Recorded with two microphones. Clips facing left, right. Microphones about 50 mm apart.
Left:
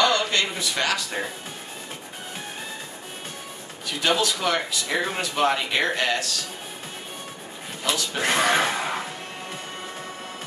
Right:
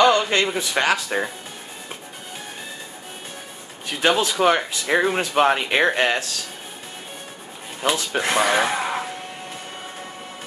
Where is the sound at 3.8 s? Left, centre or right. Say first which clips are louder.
Right 3 dB; right.